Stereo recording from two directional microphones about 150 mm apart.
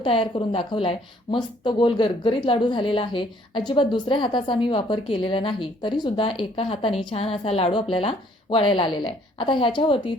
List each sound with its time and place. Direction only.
0.0 s speech: 35° left (ahead or behind)